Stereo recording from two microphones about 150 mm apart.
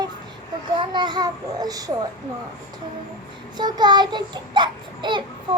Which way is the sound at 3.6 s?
30° right (ahead or behind).